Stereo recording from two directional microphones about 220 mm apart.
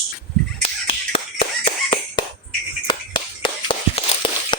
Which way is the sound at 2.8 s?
20° left (ahead or behind).